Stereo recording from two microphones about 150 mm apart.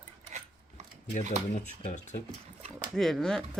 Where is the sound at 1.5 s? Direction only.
50° left (ahead or behind).